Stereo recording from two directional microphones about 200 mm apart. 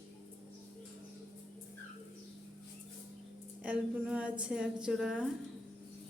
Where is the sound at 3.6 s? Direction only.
5° right (ahead or behind).